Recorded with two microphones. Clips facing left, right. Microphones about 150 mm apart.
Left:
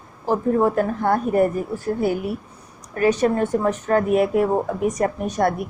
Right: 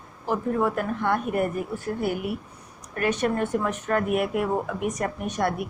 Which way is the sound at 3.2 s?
35° left (ahead or behind).